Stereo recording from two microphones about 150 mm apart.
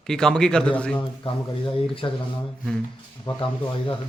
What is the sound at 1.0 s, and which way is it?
Speech, 30° left (ahead or behind).